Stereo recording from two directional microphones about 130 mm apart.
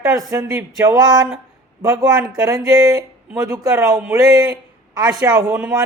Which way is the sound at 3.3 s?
25° right (ahead or behind).